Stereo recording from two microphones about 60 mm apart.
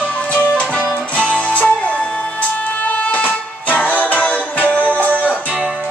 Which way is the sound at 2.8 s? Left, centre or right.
Left.